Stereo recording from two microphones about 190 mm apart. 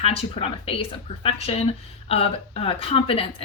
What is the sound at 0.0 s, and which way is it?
A woman's voice, 30° left (ahead or behind).